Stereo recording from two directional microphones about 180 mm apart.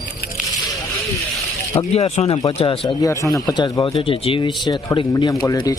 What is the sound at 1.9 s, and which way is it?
Speech, 35° left (ahead or behind).